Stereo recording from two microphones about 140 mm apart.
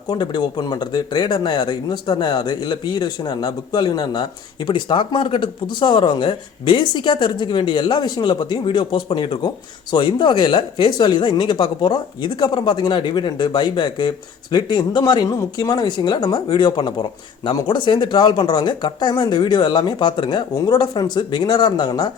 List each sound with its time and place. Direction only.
0.1 s speech: 30° left (ahead or behind)